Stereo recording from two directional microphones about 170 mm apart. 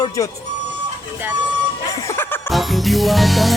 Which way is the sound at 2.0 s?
15° left (ahead or behind).